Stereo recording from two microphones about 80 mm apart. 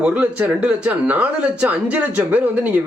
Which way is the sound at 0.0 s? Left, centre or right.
Centre.